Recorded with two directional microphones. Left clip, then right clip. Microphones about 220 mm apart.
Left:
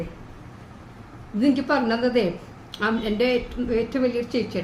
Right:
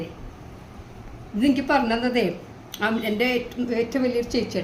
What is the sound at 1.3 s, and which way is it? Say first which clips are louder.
A woman's voice: right 1 dB; 15° left (ahead or behind).